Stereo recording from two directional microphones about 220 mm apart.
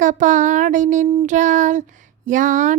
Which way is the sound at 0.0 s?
35° right (ahead or behind).